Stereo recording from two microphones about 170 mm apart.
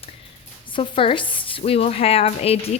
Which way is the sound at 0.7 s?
30° left (ahead or behind).